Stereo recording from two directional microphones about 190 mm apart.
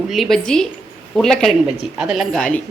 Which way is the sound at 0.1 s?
Centre (ahead or behind).